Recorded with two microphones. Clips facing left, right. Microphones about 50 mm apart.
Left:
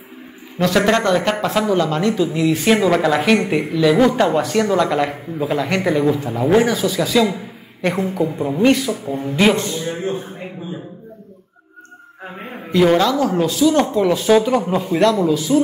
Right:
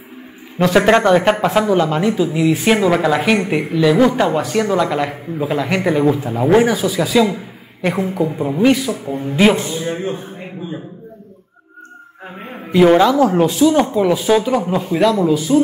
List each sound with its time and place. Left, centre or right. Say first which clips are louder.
0.6 s speech: right 3 dB; right; by 5.8 s centre
5.8 s speech: right 3 dB; centre
12.4 s a sound: right 1 dB; centre
12.7 s speech: right 4 dB; centre
13.9 s speech: even; centre